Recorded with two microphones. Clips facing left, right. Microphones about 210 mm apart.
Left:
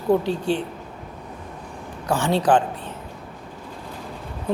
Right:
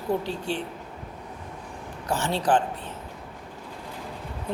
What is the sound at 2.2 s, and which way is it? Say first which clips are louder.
Mantra: left 7 dB; 15° left (ahead or behind).